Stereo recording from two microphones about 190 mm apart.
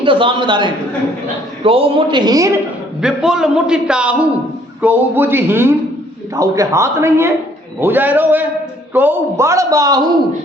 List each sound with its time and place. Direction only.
0.0 s a man's voice: 25° right (ahead or behind)
3.0 s a man's voice: 5° right (ahead or behind); by 10.0 s 20° right (ahead or behind)